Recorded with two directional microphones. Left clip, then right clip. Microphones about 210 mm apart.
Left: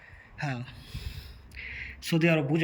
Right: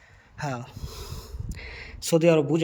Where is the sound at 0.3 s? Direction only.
20° right (ahead or behind).